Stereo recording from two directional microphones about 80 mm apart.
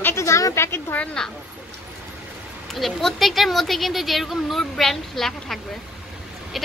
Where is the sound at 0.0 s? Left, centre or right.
Left.